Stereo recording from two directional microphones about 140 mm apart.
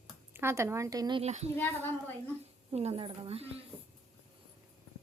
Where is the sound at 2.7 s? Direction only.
50° right (ahead or behind).